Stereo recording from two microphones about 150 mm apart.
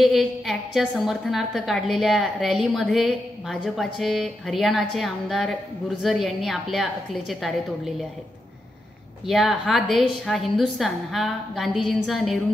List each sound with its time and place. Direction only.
0.0 s a woman's voice: centre (ahead or behind)
9.2 s a woman's voice: centre (ahead or behind)